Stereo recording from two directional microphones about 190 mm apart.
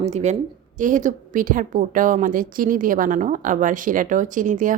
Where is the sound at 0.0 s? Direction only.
35° right (ahead or behind).